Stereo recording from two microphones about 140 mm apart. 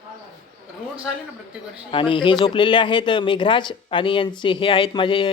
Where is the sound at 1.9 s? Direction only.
35° left (ahead or behind).